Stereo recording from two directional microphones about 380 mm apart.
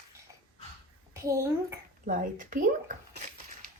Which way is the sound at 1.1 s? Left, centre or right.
Centre.